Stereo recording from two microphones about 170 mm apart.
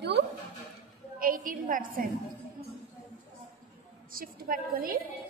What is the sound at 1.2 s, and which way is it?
Speech, 55° right (ahead or behind).